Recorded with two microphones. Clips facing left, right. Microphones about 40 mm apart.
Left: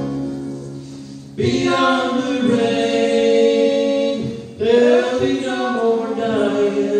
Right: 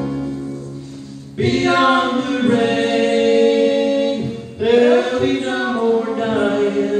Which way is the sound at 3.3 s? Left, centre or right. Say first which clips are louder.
Even; right.